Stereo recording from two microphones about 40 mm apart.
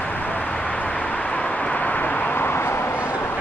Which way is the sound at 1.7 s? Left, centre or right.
Left.